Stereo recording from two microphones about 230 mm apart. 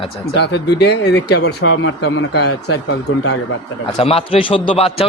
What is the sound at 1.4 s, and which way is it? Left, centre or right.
Speech, left.